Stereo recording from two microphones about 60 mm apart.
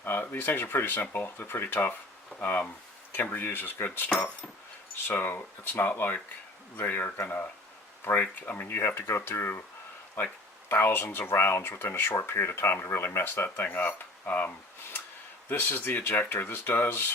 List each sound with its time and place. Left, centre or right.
0.0 s speech: left
10.7 s speech: left
13.6 s speech: left